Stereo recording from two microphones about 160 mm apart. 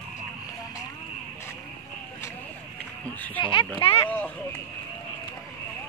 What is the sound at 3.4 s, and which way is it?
Speech, 30° left (ahead or behind).